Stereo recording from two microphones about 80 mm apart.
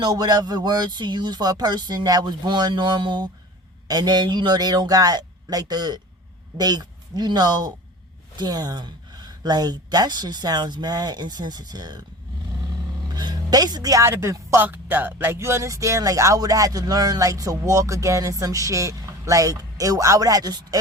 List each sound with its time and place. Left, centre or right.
0.0 s speech: right
3.8 s speech: right
13.1 s speech: right
14.6 s speech: right